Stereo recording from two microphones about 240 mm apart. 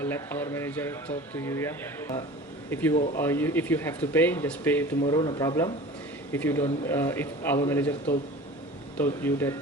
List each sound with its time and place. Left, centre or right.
0.0 s speech: centre
5.0 s speech: centre